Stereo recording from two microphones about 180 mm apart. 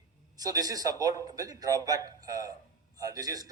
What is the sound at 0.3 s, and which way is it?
A man's voice, 20° right (ahead or behind).